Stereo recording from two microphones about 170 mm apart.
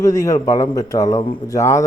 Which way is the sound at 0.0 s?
20° left (ahead or behind).